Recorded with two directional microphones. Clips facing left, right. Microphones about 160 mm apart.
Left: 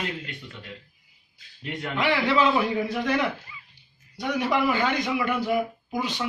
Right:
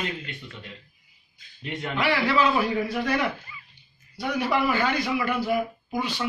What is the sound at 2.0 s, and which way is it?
A man's voice, 20° left (ahead or behind).